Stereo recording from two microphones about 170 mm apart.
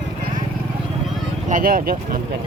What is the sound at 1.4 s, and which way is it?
Speech, 55° right (ahead or behind).